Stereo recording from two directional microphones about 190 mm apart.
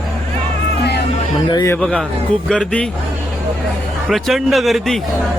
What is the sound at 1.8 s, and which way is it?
Speech, 5° left (ahead or behind).